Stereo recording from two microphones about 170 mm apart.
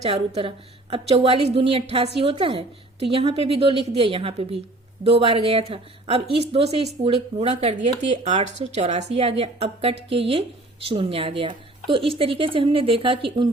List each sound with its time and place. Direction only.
0.0 s a woman's voice: 35° right (ahead or behind)